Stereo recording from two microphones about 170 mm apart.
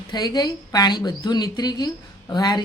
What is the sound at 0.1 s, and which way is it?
A woman's voice, 25° left (ahead or behind).